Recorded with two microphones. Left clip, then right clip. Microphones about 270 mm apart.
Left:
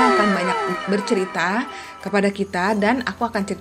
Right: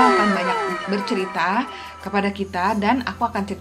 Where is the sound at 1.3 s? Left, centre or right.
Left.